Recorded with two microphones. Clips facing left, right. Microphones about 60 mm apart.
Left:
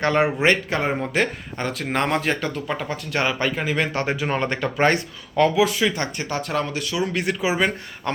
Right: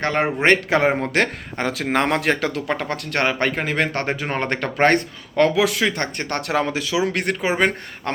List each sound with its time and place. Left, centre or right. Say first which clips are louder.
0.0 s speech: left 2 dB; right
0.3 s speech: right 2 dB; right
1.1 s speech: right 2 dB; right
4.1 s speech: left 1 dB; right
4.4 s speech: right 3 dB; right
5.5 s speech: even; right
6.3 s speech: right 4 dB; right